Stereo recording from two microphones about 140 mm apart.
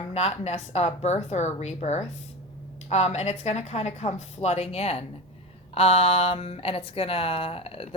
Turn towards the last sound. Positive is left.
turn(degrees=45)  # may be behind; listen again after turning